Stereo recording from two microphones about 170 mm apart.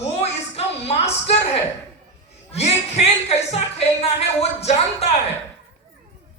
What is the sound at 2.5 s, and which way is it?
Speech, 35° left (ahead or behind).